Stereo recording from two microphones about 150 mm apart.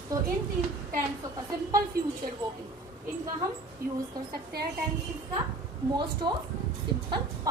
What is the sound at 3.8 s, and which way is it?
Speech, 75° right (ahead or behind).